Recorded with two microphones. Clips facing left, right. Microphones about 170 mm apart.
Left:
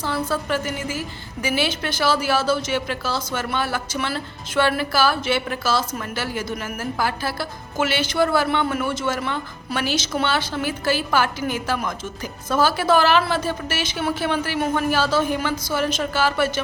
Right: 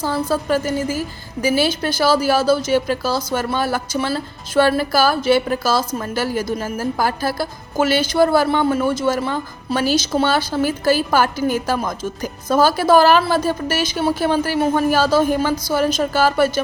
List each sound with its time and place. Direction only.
0.0 s speech: 40° right (ahead or behind)